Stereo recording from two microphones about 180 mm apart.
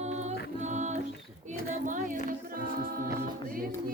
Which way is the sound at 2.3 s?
55° right (ahead or behind).